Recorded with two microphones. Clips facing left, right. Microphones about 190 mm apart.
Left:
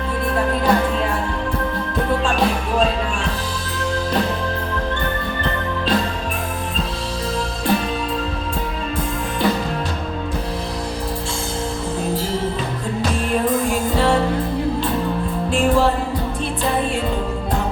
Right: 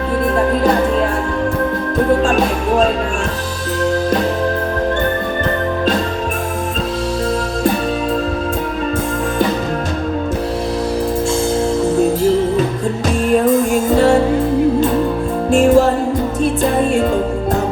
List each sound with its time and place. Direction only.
2.2 s music: 45° right (ahead or behind)
13.4 s music: 45° right (ahead or behind)
15.4 s music: 45° right (ahead or behind)